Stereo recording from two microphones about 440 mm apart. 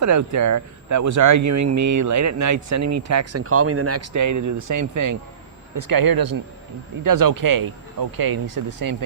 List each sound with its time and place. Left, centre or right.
0.0 s speech: right